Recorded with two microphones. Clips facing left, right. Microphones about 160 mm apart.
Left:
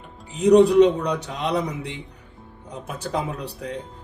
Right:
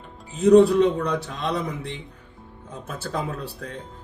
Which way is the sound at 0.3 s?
15° left (ahead or behind).